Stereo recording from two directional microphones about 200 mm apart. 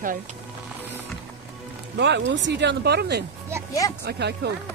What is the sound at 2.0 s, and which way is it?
Speech, 60° right (ahead or behind).